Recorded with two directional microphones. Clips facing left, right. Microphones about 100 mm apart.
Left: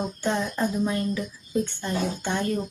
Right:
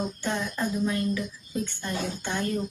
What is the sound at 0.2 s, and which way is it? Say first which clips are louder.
Speech: left 4 dB; 25° left (ahead or behind).